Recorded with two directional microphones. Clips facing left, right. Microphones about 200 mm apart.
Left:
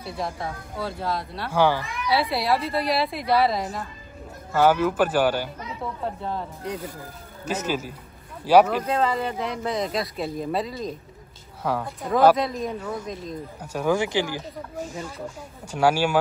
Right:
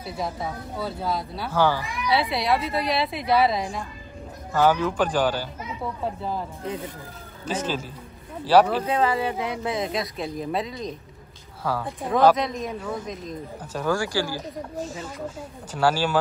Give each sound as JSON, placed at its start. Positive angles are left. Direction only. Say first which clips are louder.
{"t": 0.0, "sound": "speech", "louder": "right 1 dB", "side_deg": -5}
{"t": 1.5, "sound": "speech", "louder": "left 1 dB", "side_deg": 15}
{"t": 1.8, "sound": "speech", "louder": "right 1 dB", "side_deg": -15}
{"t": 2.0, "sound": "speech", "louder": "even", "side_deg": 0}
{"t": 5.6, "sound": "speech", "louder": "right 1 dB", "side_deg": 0}
{"t": 7.4, "sound": "speech", "louder": "left 1 dB", "side_deg": 10}
{"t": 8.8, "sound": "speech", "louder": "right 1 dB", "side_deg": -5}
{"t": 12.1, "sound": "speech", "louder": "left 1 dB", "side_deg": 5}
{"t": 13.6, "sound": "speech", "louder": "left 2 dB", "side_deg": 15}